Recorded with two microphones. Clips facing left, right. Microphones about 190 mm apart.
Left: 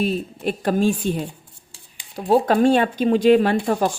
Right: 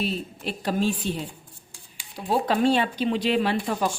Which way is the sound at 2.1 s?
45° left (ahead or behind).